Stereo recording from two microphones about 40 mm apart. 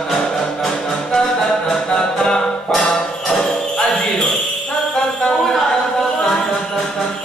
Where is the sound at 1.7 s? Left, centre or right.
Left.